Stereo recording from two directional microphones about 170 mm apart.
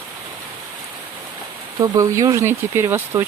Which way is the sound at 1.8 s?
20° right (ahead or behind).